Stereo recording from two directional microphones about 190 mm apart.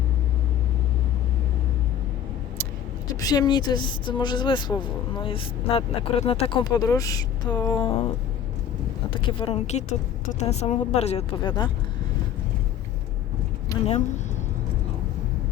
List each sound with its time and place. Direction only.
3.2 s speech: 20° left (ahead or behind)
9.1 s speech: 30° left (ahead or behind)
13.7 s a sound: 15° left (ahead or behind)